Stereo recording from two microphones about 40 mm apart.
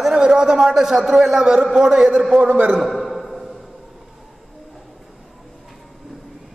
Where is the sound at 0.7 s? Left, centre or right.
Centre.